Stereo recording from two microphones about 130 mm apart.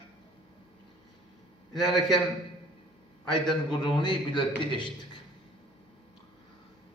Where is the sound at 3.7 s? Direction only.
35° left (ahead or behind).